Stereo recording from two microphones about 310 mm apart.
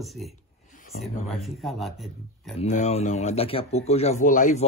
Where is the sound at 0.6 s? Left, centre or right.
Left.